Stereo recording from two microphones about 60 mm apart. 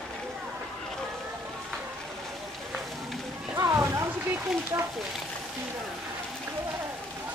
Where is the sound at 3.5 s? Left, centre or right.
Right.